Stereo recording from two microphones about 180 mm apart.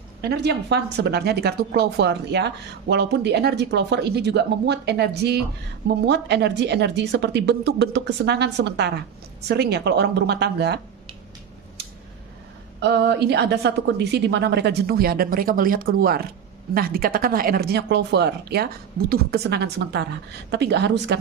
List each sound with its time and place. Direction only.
0.2 s speech: 65° right (ahead or behind)
12.8 s speech: 70° right (ahead or behind)